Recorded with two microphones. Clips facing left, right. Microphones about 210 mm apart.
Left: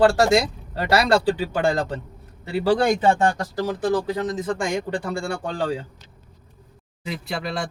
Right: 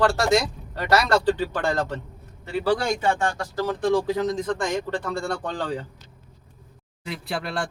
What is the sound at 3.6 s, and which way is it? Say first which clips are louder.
Speech: right 1 dB; 10° left (ahead or behind).